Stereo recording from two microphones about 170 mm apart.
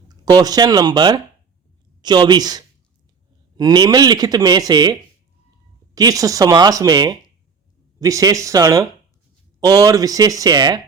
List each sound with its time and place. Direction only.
0.1 s speech: 25° right (ahead or behind)